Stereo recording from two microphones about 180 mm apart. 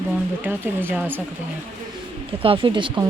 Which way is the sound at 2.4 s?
30° right (ahead or behind).